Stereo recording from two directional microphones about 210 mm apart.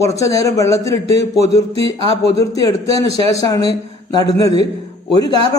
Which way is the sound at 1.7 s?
30° right (ahead or behind).